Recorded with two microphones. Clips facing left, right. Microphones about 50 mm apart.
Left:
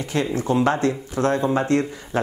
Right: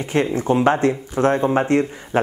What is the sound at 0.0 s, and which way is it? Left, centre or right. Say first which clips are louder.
Speech: right 3 dB; right.